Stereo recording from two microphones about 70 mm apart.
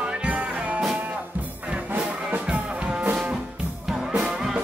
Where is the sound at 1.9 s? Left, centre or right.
Centre.